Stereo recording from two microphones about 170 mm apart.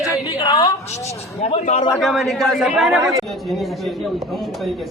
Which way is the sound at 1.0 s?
35° left (ahead or behind).